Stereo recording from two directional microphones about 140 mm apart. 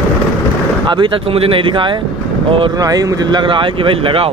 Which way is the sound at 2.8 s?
25° right (ahead or behind).